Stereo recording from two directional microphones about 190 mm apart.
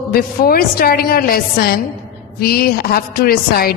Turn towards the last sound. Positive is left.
turn(degrees=50)  # may be behind; listen again after turning